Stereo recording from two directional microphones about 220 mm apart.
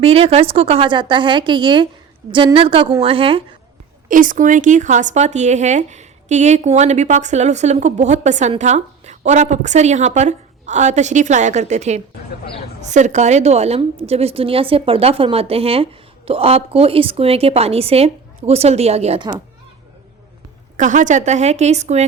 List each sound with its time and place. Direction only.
0.0 s a woman's voice: 25° right (ahead or behind)
4.1 s a woman's voice: 35° right (ahead or behind)
20.7 s speech: 35° right (ahead or behind)